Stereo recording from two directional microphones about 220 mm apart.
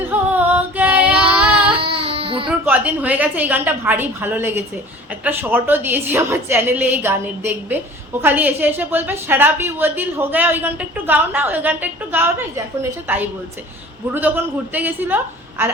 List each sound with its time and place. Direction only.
0.0 s music: 10° right (ahead or behind)
1.5 s a sound: 25° right (ahead or behind)
2.5 s a woman's voice: 5° right (ahead or behind)
14.1 s a woman's voice: 10° right (ahead or behind)